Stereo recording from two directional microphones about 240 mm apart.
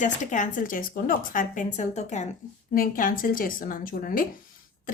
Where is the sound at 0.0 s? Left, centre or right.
Left.